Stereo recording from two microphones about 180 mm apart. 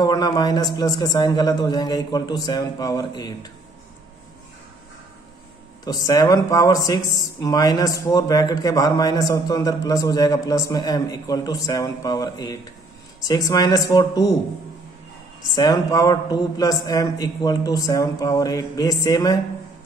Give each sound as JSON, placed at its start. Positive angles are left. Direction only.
{"t": 0.0, "sound": "speech", "side_deg": 20}
{"t": 5.9, "sound": "speech", "side_deg": 20}
{"t": 15.5, "sound": "speech", "side_deg": 20}